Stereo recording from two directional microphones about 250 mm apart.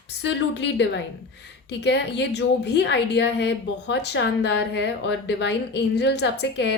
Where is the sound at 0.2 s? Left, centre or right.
Left.